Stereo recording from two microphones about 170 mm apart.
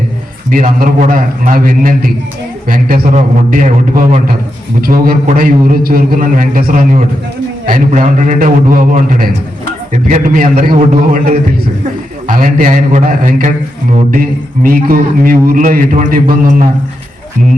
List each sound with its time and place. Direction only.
0.5 s a man's voice: 50° right (ahead or behind)